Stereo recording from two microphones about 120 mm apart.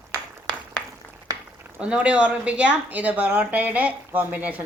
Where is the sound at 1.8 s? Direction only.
10° right (ahead or behind).